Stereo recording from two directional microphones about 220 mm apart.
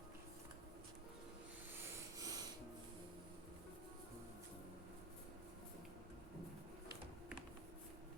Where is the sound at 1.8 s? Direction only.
15° right (ahead or behind).